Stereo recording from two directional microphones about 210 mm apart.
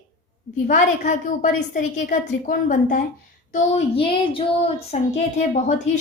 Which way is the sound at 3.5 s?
30° left (ahead or behind).